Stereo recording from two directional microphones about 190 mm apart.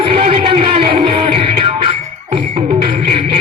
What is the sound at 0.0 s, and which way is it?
Music, 30° right (ahead or behind).